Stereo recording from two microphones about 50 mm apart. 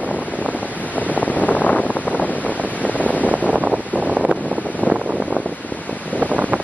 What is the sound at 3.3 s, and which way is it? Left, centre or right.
Wind noise, right.